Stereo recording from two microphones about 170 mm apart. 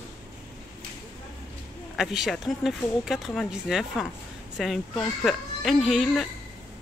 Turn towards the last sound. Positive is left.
turn(degrees=0)  # may be behind; listen again after turning